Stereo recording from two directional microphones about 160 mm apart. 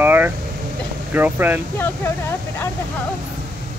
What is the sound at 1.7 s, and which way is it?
Speech, 15° left (ahead or behind).